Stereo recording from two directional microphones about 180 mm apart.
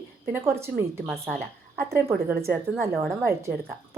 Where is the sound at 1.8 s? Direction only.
15° right (ahead or behind).